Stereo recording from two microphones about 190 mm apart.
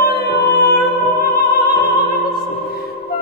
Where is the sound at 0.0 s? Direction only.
55° left (ahead or behind).